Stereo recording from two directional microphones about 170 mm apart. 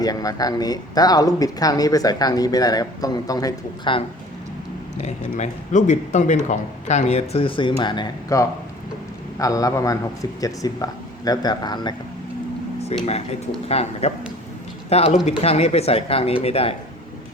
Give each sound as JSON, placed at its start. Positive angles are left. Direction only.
{"t": 0.0, "sound": "speech", "side_deg": 20}
{"t": 4.9, "sound": "speech", "side_deg": 45}
{"t": 13.7, "sound": "speech", "side_deg": 35}